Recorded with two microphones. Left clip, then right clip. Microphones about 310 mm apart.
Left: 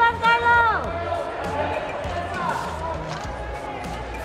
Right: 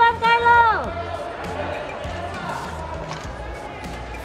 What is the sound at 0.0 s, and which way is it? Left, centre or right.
Run, right.